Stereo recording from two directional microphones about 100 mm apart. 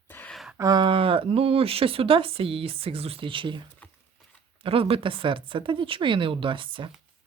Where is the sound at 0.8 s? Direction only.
60° right (ahead or behind).